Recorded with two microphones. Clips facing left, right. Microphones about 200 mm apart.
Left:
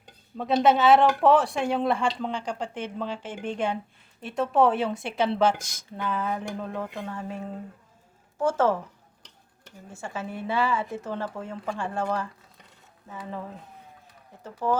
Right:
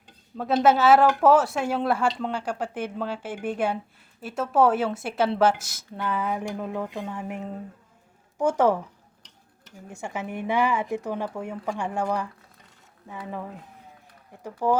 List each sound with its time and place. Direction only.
0.3 s a woman's voice: 5° right (ahead or behind)
9.9 s speech: 15° right (ahead or behind)
14.4 s speech: 10° right (ahead or behind)